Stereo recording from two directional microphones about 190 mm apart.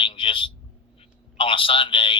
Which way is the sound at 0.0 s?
25° left (ahead or behind).